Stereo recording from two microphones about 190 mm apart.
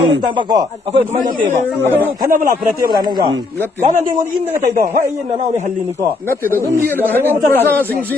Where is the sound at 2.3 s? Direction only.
45° right (ahead or behind).